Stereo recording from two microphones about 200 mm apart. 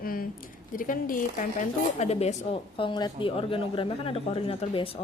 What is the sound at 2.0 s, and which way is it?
Speech, 30° left (ahead or behind).